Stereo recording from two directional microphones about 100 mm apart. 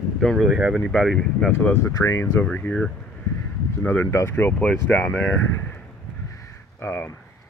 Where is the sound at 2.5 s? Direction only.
15° left (ahead or behind).